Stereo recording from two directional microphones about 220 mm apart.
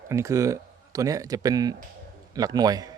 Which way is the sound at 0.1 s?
15° right (ahead or behind).